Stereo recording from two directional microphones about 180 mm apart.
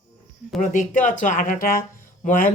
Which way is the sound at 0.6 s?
45° left (ahead or behind).